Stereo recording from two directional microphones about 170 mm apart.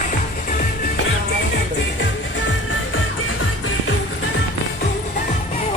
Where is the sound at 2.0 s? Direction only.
90° left.